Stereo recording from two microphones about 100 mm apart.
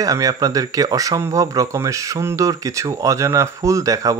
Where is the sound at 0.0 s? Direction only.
35° right (ahead or behind).